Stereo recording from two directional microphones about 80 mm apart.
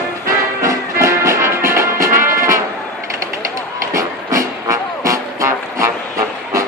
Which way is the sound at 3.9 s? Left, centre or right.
Right.